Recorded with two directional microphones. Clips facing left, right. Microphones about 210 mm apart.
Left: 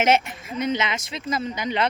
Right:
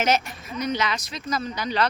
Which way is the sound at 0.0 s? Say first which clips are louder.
Left 3 dB; 25° left (ahead or behind).